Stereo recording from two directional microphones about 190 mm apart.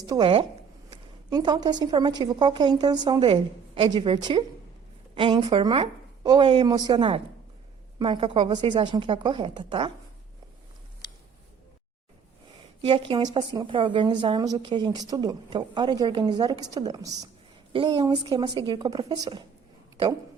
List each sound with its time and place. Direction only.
0.0 s a woman's voice: 25° right (ahead or behind)
6.7 s a woman's voice: 20° right (ahead or behind)
12.9 s a woman's voice: 25° right (ahead or behind)